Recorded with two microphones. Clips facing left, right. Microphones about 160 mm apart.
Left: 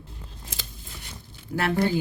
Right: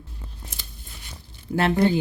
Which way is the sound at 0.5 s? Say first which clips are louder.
Left 3 dB; 90° left.